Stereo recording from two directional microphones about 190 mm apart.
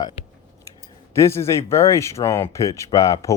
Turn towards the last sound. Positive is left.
turn(degrees=15)  # may be behind; listen again after turning